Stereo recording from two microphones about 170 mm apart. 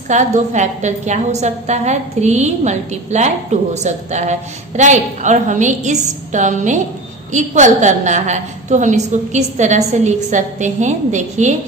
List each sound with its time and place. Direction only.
0.1 s a woman's voice: 45° right (ahead or behind)